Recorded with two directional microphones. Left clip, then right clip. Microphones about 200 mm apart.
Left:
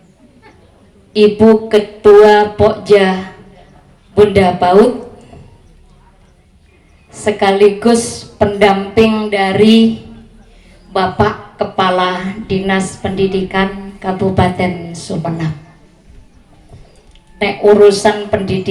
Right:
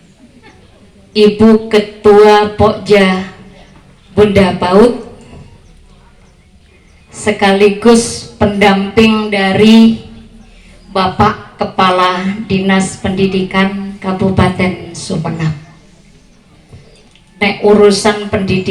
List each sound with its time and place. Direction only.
1.1 s a sound: 15° left (ahead or behind)
7.1 s a woman's voice: 20° left (ahead or behind)
10.9 s a woman's voice: 20° left (ahead or behind)
17.3 s a woman's voice: 20° left (ahead or behind)